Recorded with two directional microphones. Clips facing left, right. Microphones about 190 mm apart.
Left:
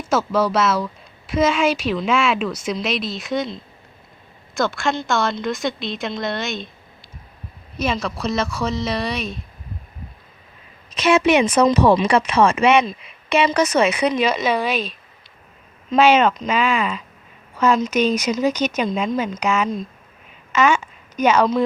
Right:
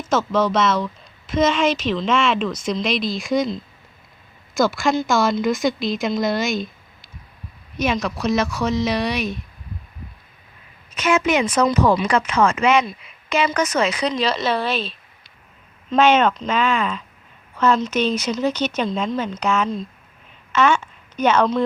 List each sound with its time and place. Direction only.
0.0 s a woman's voice: 10° left (ahead or behind)
7.8 s speech: centre (ahead or behind)
11.0 s speech: 30° left (ahead or behind)
14.0 s a woman's voice: 15° left (ahead or behind)
15.9 s a woman's voice: 5° left (ahead or behind)